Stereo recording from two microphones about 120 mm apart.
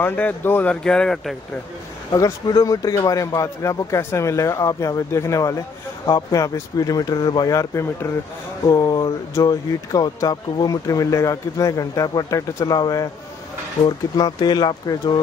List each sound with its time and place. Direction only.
0.0 s speech: 15° left (ahead or behind)
0.8 s speech: 5° left (ahead or behind)
2.1 s speech: 30° left (ahead or behind)